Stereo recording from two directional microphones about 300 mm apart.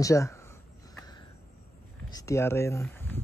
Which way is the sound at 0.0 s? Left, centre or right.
Centre.